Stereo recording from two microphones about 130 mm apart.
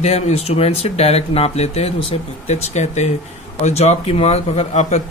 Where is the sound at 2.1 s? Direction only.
40° left (ahead or behind).